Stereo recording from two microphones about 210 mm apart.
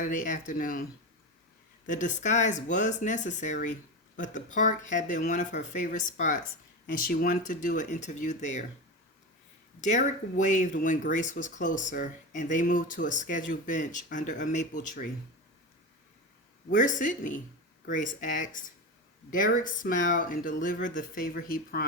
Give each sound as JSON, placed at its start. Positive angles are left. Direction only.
{"t": 0.0, "sound": "speech", "side_deg": 40}
{"t": 1.9, "sound": "speech", "side_deg": 35}
{"t": 9.8, "sound": "speech", "side_deg": 35}
{"t": 16.6, "sound": "speech", "side_deg": 40}